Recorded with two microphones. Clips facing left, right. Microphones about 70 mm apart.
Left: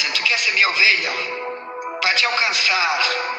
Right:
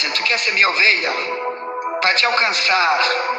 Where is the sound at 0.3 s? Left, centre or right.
Right.